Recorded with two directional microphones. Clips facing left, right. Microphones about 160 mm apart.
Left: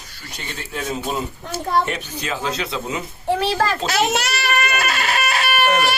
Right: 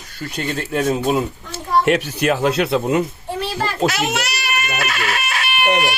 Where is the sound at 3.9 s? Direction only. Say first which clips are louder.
Left 2 dB; 35° left (ahead or behind).